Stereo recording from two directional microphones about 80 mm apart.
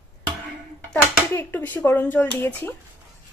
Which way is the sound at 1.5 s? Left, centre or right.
Left.